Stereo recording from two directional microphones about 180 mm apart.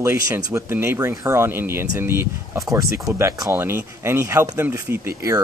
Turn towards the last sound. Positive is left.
turn(degrees=-15)  # may be behind; listen again after turning